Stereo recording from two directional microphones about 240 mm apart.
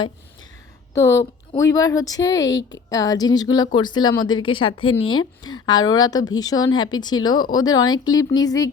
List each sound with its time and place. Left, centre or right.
0.9 s a woman's voice: centre